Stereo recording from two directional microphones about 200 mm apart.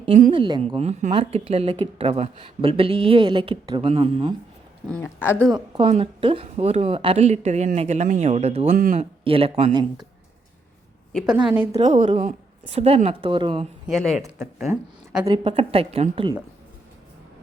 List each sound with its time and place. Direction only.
0.3 s speech: 25° right (ahead or behind)
4.9 s speech: 10° left (ahead or behind)
5.5 s speech: 20° right (ahead or behind)
8.7 s speech: 45° right (ahead or behind)
9.0 s speech: 30° right (ahead or behind)
11.1 s a woman's voice: 5° left (ahead or behind)
11.4 s a woman's voice: 10° right (ahead or behind)
11.7 s speech: 35° right (ahead or behind)
13.8 s speech: centre (ahead or behind)
14.7 s speech: 10° right (ahead or behind)
15.3 s speech: 30° right (ahead or behind)